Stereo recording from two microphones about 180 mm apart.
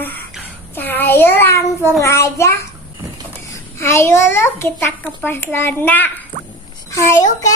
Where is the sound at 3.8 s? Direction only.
15° left (ahead or behind).